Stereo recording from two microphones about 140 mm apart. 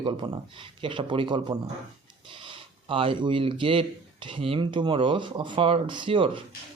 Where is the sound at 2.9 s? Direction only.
40° right (ahead or behind).